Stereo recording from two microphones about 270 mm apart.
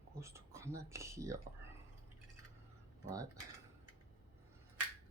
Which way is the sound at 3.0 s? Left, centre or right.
Centre.